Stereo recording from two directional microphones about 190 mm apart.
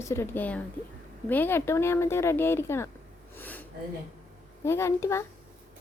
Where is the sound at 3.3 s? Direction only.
10° left (ahead or behind).